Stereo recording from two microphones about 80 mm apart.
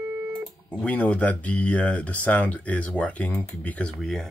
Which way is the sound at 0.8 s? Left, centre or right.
Centre.